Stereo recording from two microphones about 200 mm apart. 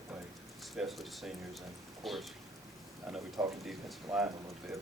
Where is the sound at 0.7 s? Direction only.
Centre (ahead or behind).